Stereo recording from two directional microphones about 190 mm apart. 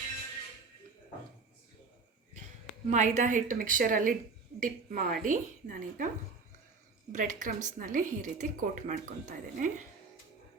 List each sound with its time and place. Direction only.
2.9 s a woman's voice: 40° right (ahead or behind)
7.1 s a woman's voice: 45° right (ahead or behind)